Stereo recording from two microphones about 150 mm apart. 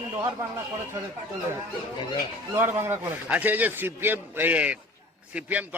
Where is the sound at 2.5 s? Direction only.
15° right (ahead or behind).